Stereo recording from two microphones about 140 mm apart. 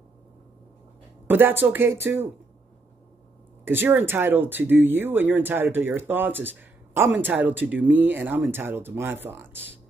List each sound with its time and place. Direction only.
1.2 s speech: 15° right (ahead or behind)
3.6 s speech: 15° right (ahead or behind)